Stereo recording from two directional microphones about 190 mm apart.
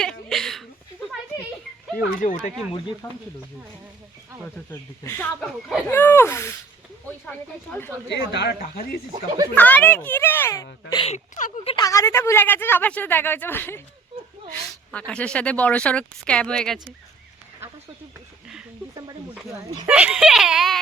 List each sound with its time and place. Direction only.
0.0 s a sound: 5° left (ahead or behind)
2.0 s speech: 45° left (ahead or behind)
3.0 s speech: 15° left (ahead or behind)
4.4 s speech: 10° left (ahead or behind)
8.1 s speech: 65° left (ahead or behind)
8.6 s speech: 50° left (ahead or behind)
9.6 s speech: 10° left (ahead or behind)
11.1 s speech: 40° left (ahead or behind)
11.8 s speech: 15° left (ahead or behind)
19.9 s speech: 5° right (ahead or behind)